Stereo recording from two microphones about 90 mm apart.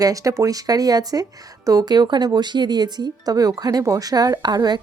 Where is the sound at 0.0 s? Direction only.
40° right (ahead or behind).